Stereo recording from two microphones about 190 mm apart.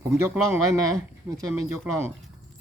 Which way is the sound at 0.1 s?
5° right (ahead or behind).